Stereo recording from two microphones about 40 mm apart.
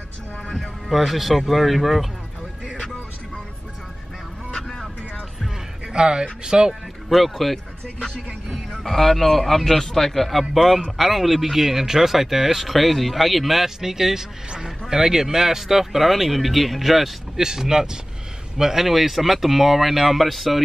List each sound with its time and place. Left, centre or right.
0.6 s speech: centre
4.6 s vehicle: centre
5.9 s speech: right
6.7 s speech: centre
8.7 s speech: centre
17.4 s speech: centre